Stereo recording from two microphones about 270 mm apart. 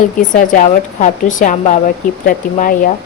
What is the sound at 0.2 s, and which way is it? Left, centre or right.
A woman's voice, left.